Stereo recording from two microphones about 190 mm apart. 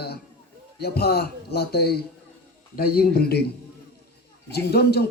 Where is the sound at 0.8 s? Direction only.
55° left (ahead or behind).